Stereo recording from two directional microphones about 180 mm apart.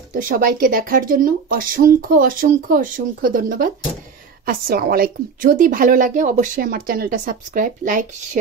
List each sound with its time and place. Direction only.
0.1 s a woman's voice: 50° right (ahead or behind)